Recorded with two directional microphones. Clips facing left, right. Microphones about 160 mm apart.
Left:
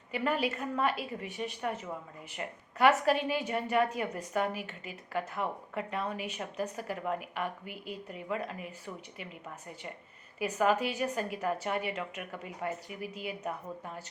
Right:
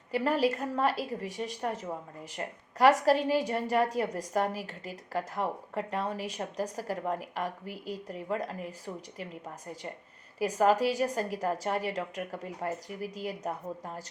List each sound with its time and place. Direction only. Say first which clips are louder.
0.1 s a woman's voice: right 4 dB; 35° right (ahead or behind)
10.4 s a woman's voice: right 3 dB; 35° right (ahead or behind)